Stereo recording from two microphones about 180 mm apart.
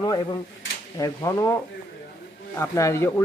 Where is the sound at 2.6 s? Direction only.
15° left (ahead or behind).